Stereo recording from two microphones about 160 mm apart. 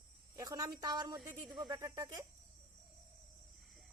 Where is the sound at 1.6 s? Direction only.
20° right (ahead or behind).